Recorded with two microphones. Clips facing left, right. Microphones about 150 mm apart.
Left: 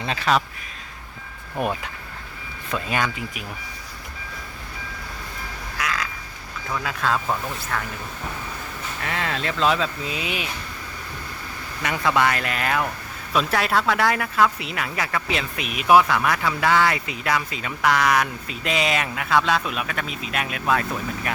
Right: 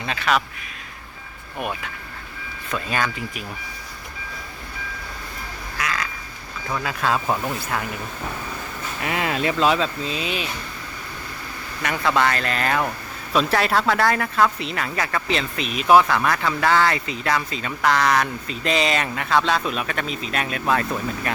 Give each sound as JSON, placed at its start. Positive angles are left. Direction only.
{"t": 0.0, "sound": "a man's voice", "side_deg": 30}
{"t": 2.7, "sound": "speech", "side_deg": 20}
{"t": 5.7, "sound": "duck", "side_deg": 0}
{"t": 6.7, "sound": "speech", "side_deg": -5}
{"t": 9.0, "sound": "speech", "side_deg": -15}
{"t": 9.6, "sound": "speech", "side_deg": 0}
{"t": 10.0, "sound": "speech", "side_deg": 15}
{"t": 11.8, "sound": "speech", "side_deg": 15}